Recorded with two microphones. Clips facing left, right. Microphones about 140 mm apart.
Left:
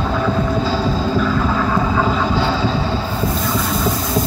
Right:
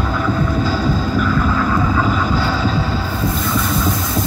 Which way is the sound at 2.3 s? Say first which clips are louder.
Left 1 dB; 25° left (ahead or behind).